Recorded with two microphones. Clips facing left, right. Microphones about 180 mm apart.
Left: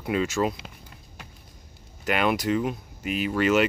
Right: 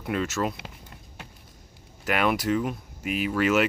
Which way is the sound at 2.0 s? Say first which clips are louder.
Even; 5° right (ahead or behind).